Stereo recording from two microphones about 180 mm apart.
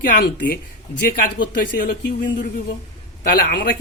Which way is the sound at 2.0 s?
65° left (ahead or behind).